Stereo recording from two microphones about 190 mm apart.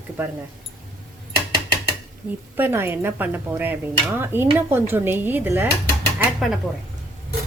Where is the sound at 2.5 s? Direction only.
10° right (ahead or behind).